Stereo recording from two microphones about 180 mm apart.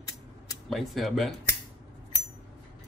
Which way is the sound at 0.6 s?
Centre (ahead or behind).